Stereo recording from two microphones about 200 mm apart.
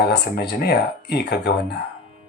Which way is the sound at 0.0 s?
55° left (ahead or behind).